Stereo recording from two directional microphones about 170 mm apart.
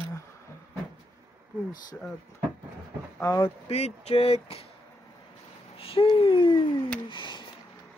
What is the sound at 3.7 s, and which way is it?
Speech, 40° left (ahead or behind).